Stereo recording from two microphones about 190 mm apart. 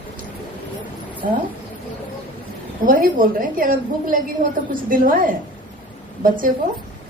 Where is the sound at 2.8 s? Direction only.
45° right (ahead or behind).